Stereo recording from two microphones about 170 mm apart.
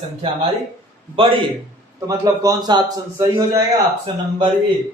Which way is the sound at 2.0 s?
20° right (ahead or behind).